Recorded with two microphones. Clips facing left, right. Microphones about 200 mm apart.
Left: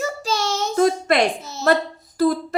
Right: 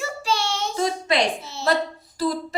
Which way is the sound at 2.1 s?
55° left (ahead or behind).